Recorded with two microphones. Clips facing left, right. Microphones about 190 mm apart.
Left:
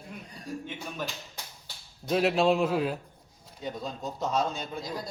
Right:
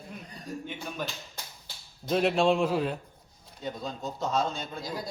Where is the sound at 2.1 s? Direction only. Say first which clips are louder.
Even; centre (ahead or behind).